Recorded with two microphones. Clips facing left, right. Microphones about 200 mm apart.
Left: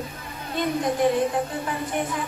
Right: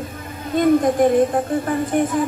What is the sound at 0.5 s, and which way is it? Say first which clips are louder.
Speech: right 9 dB; 50° right (ahead or behind).